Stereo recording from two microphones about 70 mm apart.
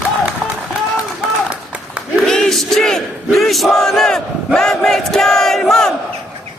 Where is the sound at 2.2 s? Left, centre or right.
Centre.